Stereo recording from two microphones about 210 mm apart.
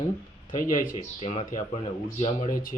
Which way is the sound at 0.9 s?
30° left (ahead or behind).